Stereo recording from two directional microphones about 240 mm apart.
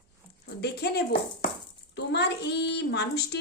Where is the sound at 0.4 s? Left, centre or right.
Left.